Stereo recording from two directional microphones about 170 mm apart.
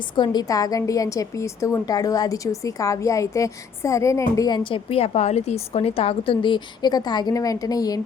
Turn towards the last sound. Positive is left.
turn(degrees=20)  # may be behind; listen again after turning